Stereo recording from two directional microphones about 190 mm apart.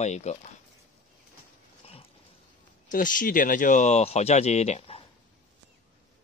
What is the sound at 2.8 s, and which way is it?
Speech, 45° left (ahead or behind).